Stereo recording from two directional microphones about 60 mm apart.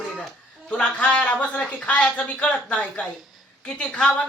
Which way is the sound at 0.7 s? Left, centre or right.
Centre.